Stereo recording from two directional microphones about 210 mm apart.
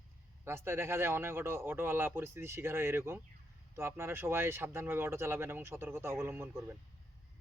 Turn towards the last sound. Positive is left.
turn(degrees=-10)  # may be behind; listen again after turning